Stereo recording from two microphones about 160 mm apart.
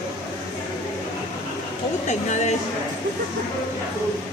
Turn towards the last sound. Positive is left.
turn(degrees=45)  # may be behind; listen again after turning